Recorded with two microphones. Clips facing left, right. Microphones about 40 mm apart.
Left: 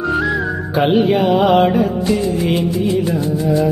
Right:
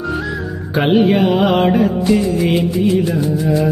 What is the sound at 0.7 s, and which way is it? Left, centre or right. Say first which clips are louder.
Music: right 1 dB; centre.